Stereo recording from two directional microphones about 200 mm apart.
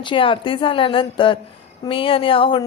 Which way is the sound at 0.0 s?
25° left (ahead or behind).